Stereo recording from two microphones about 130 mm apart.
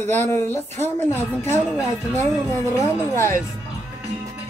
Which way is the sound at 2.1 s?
20° left (ahead or behind).